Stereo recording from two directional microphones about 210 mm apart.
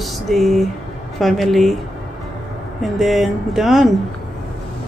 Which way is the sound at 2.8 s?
Centre (ahead or behind).